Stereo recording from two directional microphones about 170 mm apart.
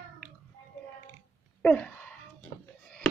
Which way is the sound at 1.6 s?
5° left (ahead or behind).